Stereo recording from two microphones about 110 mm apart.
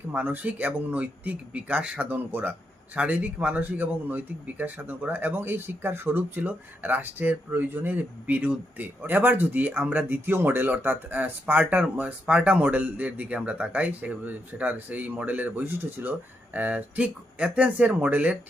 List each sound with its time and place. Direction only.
0.1 s speech: 15° right (ahead or behind)